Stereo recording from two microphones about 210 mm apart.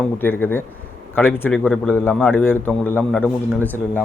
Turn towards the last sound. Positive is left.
turn(degrees=10)  # may be behind; listen again after turning